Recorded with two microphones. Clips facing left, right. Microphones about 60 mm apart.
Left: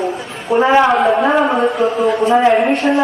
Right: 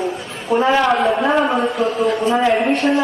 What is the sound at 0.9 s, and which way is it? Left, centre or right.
A man's voice, centre.